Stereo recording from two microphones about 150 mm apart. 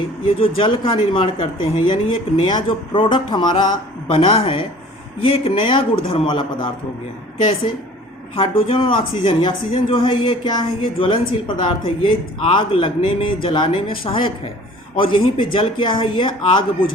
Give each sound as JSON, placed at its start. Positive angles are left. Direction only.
{"t": 0.3, "sound": "a woman's voice", "side_deg": 40}
{"t": 8.4, "sound": "a woman's voice", "side_deg": 40}